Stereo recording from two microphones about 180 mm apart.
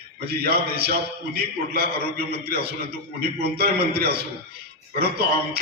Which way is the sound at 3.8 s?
60° right (ahead or behind).